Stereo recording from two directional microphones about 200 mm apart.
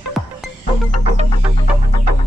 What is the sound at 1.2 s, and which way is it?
Music, 25° left (ahead or behind).